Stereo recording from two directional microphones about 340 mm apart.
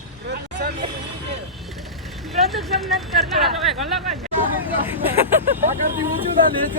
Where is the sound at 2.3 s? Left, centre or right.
Centre.